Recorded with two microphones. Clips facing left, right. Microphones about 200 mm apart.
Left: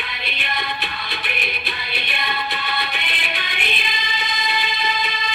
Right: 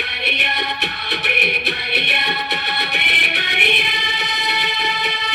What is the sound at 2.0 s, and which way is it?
Music, 70° right (ahead or behind).